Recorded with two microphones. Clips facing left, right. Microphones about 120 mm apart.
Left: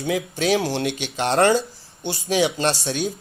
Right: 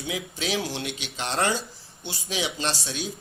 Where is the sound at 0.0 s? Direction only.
55° left (ahead or behind).